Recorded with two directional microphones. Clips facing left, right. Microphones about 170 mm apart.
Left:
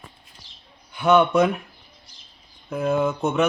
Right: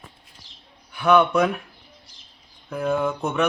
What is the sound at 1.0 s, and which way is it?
Speech, 20° left (ahead or behind).